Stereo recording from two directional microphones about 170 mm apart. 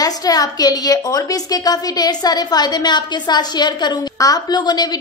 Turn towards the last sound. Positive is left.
turn(degrees=25)  # may be behind; listen again after turning